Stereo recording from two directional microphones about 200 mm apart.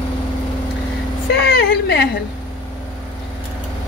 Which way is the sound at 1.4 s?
50° left (ahead or behind).